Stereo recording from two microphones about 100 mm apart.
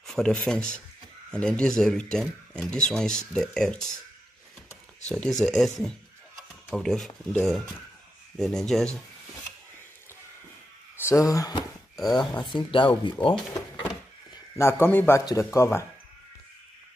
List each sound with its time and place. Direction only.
0.0 s speech: 5° left (ahead or behind)
5.0 s speech: 5° left (ahead or behind)
11.0 s speech: 30° left (ahead or behind)
12.1 s speech: 45° left (ahead or behind)
14.6 s a man's voice: 25° left (ahead or behind)